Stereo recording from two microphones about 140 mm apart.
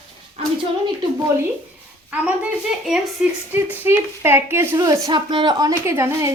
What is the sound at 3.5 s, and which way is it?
A woman's voice, 15° right (ahead or behind).